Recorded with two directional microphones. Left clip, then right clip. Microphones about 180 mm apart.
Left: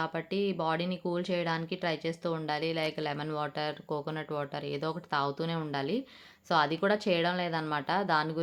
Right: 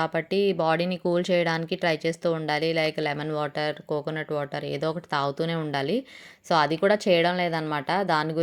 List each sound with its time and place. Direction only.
0.0 s speech: 30° right (ahead or behind)